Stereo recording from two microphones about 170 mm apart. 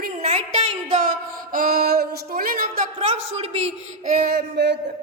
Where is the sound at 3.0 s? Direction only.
40° right (ahead or behind).